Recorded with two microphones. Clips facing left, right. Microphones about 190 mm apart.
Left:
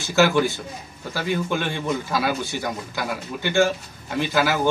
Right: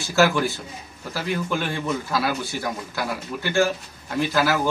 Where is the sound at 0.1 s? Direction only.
Centre (ahead or behind).